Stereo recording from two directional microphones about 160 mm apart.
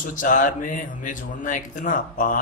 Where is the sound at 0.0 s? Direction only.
55° left (ahead or behind).